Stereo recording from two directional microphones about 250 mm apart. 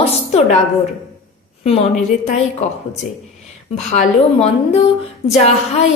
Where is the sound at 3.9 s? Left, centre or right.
Left.